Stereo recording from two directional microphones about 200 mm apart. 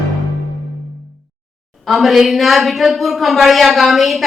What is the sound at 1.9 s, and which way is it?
A man's voice, centre (ahead or behind).